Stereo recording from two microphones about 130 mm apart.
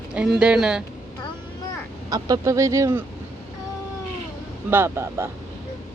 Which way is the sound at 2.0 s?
30° right (ahead or behind).